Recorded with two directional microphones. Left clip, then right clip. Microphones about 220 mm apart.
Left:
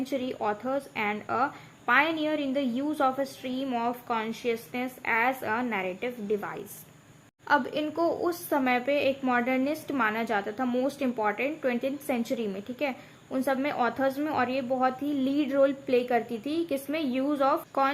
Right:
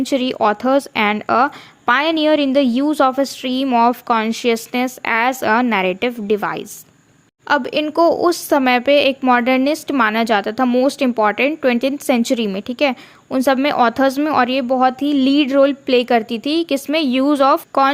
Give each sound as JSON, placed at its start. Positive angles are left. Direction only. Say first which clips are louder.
{"t": 0.0, "sound": "a woman's voice", "louder": "right 14 dB", "side_deg": -45}